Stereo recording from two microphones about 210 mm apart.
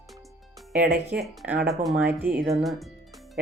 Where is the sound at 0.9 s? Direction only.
50° right (ahead or behind).